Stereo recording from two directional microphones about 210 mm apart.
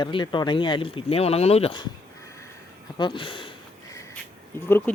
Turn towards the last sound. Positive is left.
turn(degrees=10)  # may be behind; listen again after turning